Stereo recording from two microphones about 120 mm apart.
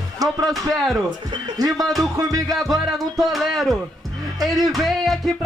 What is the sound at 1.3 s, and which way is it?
Speech, 30° right (ahead or behind).